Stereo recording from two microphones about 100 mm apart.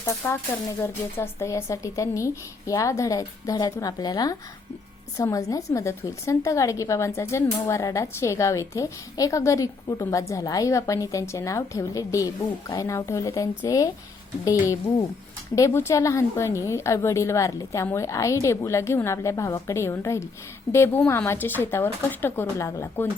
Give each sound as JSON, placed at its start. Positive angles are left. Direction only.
{"t": 0.2, "sound": "a woman's voice", "side_deg": 25}
{"t": 15.5, "sound": "a woman's voice", "side_deg": 30}